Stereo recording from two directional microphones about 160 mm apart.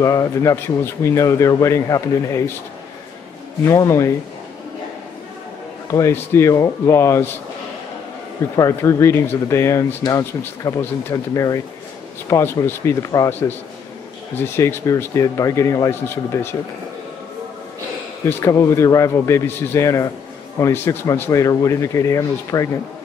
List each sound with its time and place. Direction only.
0.0 s speech: 20° left (ahead or behind)
3.6 s speech: 20° left (ahead or behind)
5.9 s speech: 15° left (ahead or behind)
8.5 s speech: 20° left (ahead or behind)
18.2 s speech: 20° left (ahead or behind)